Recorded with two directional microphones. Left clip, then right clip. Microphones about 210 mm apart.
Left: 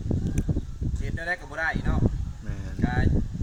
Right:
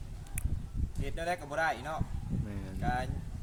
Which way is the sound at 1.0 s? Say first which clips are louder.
Left 4 dB; 20° right (ahead or behind).